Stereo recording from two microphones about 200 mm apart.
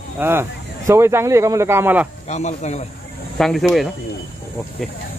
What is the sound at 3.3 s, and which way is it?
Speech, centre (ahead or behind).